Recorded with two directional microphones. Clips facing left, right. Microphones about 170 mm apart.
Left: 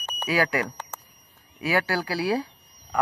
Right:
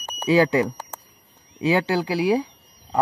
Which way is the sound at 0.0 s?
20° right (ahead or behind).